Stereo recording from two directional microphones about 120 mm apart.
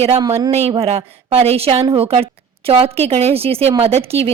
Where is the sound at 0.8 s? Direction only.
55° right (ahead or behind).